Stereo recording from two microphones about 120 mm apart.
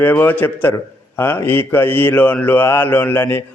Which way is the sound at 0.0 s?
15° left (ahead or behind).